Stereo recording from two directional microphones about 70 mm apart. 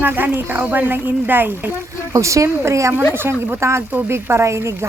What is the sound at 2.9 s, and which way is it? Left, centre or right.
A woman's voice, right.